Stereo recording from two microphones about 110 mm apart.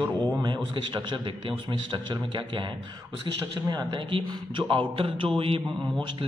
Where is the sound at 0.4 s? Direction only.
45° right (ahead or behind).